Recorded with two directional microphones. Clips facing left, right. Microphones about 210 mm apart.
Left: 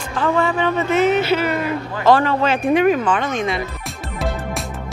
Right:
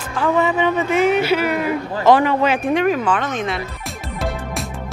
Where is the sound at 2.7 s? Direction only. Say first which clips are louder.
Left 2 dB; 5° left (ahead or behind).